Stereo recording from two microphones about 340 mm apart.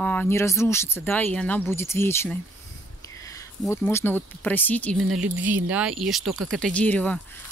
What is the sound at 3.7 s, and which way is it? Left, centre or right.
Speech, centre.